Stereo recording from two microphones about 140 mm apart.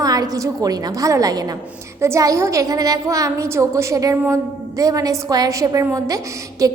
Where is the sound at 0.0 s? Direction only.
25° right (ahead or behind).